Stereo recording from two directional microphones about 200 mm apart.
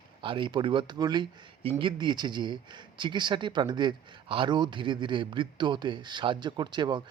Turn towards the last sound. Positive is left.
turn(degrees=-20)  # may be behind; listen again after turning